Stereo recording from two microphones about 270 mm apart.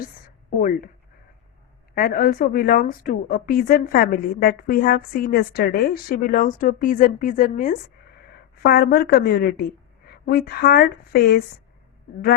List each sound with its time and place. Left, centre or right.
0.6 s a woman's voice: left
2.0 s a woman's voice: left